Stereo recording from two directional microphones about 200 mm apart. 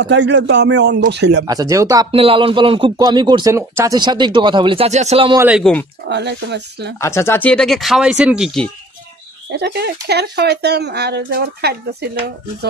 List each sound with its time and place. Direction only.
0.0 s speech: 60° right (ahead or behind)
1.4 s speech: 20° right (ahead or behind)
2.0 s a man's voice: 25° right (ahead or behind)
5.4 s speech: centre (ahead or behind)
6.0 s speech: 60° right (ahead or behind)
7.0 s speech: 15° left (ahead or behind)
9.6 s speech: 55° right (ahead or behind)